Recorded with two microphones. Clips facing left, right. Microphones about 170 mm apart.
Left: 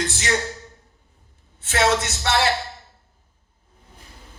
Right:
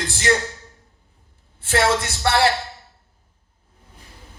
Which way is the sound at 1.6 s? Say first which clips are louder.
Right 1 dB; 55° right (ahead or behind).